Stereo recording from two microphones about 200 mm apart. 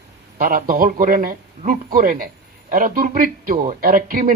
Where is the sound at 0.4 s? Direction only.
45° right (ahead or behind).